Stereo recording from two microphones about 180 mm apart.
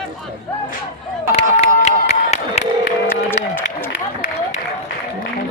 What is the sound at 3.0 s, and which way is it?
Run, 10° left (ahead or behind).